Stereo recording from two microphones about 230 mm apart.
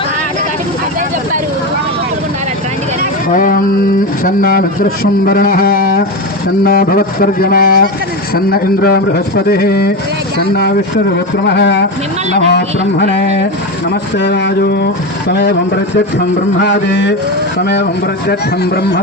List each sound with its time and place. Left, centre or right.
3.0 s a sound: left
4.2 s a man's voice: left
11.4 s a man's voice: left
14.2 s a man's voice: left